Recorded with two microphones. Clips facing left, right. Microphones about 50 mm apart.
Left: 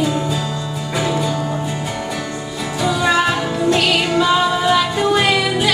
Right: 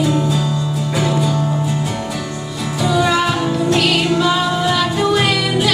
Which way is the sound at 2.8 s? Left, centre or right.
Centre.